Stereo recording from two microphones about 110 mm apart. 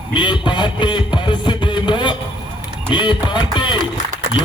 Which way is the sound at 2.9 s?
45° left (ahead or behind).